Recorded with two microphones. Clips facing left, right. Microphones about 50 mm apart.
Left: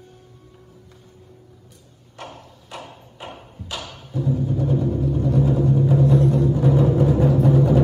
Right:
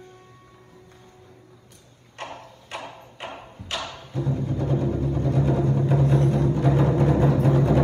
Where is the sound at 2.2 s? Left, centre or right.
Right.